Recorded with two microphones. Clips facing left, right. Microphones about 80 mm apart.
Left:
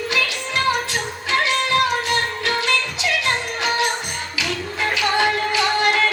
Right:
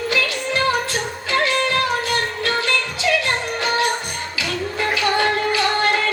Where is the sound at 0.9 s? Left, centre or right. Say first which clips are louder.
Right 1 dB; left.